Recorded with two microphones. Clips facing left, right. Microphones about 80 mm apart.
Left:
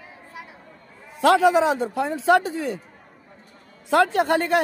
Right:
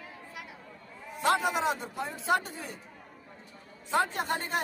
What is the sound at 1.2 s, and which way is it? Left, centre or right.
A man's voice, left.